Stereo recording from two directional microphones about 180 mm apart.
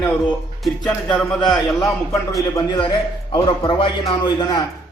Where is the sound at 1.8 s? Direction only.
20° left (ahead or behind).